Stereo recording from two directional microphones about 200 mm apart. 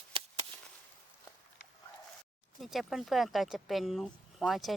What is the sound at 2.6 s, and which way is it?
Speech, centre (ahead or behind).